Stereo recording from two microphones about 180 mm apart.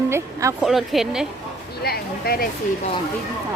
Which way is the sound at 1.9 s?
60° left (ahead or behind).